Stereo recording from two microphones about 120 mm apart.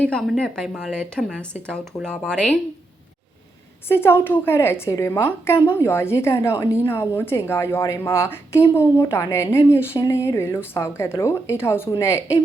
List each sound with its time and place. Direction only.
0.0 s speech: 5° left (ahead or behind)
3.8 s a woman's voice: 20° left (ahead or behind)